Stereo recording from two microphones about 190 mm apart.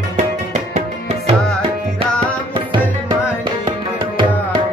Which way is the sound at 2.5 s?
25° right (ahead or behind).